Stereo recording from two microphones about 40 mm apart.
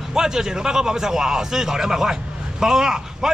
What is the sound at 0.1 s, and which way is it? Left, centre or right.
Speech, centre.